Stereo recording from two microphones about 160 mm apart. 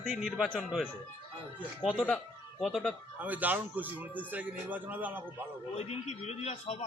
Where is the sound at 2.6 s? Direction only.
Centre (ahead or behind).